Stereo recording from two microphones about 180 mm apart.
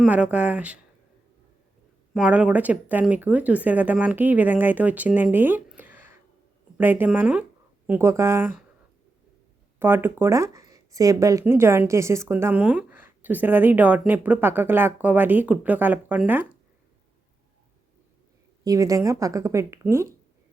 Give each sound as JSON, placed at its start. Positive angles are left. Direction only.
{"t": 0.0, "sound": "speech", "side_deg": -5}
{"t": 2.1, "sound": "speech", "side_deg": -5}
{"t": 9.7, "sound": "speech", "side_deg": -10}
{"t": 18.6, "sound": "speech", "side_deg": -20}